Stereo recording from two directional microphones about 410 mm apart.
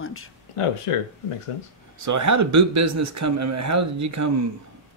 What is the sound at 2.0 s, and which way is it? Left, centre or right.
Speech, right.